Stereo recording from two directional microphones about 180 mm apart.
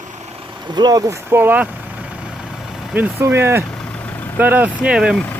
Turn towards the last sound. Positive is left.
turn(degrees=-5)  # may be behind; listen again after turning